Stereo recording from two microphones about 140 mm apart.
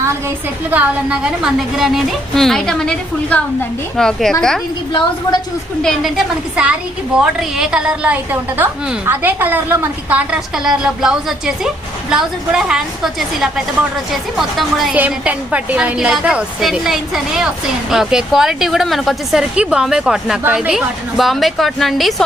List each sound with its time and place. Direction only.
0.7 s a woman's voice: 10° right (ahead or behind)
4.9 s a woman's voice: 30° left (ahead or behind)
5.8 s a woman's voice: centre (ahead or behind)